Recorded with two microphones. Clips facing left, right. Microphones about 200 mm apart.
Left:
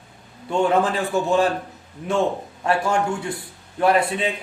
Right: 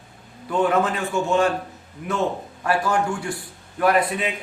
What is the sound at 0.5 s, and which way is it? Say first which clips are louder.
A man's voice: left 1 dB; 30° left (ahead or behind).